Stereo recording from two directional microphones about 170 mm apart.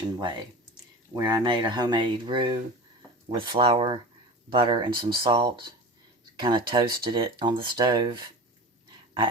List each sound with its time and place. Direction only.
0.2 s speech: 30° right (ahead or behind)